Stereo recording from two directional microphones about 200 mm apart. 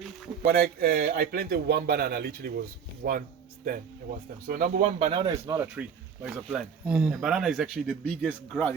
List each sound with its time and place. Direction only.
0.4 s speech: 45° right (ahead or behind)
5.2 s speech: 15° right (ahead or behind); by 8.7 s 5° left (ahead or behind)